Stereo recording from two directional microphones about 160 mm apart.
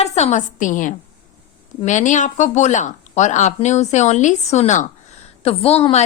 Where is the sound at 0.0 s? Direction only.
45° left (ahead or behind).